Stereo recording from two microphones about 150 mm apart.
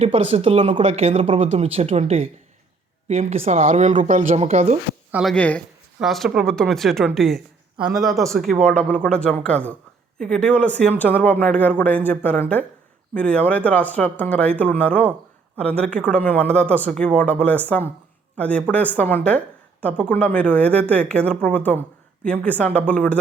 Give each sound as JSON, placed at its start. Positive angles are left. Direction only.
{"t": 0.0, "sound": "speech", "side_deg": -45}
{"t": 5.3, "sound": "a woman's voice", "side_deg": 5}